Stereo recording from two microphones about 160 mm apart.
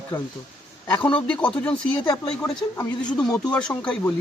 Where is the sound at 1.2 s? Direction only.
10° left (ahead or behind).